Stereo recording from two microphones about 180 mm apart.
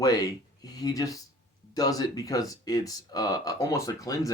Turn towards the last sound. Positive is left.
turn(degrees=20)  # may be behind; listen again after turning